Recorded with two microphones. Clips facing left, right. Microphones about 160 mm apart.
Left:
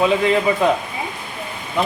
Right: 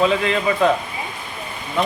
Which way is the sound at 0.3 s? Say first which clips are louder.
Left 2 dB; 15° left (ahead or behind).